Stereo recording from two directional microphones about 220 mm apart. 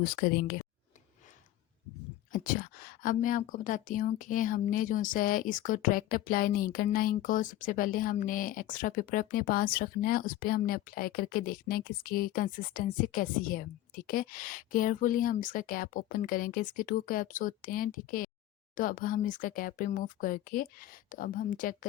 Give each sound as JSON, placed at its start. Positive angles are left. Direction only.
{"t": 0.0, "sound": "speech", "side_deg": 45}
{"t": 2.3, "sound": "a woman's voice", "side_deg": 40}